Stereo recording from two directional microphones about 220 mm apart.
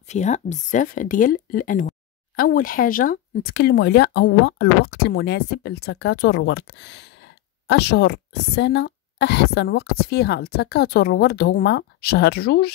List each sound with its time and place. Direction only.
0.1 s speech: 30° left (ahead or behind)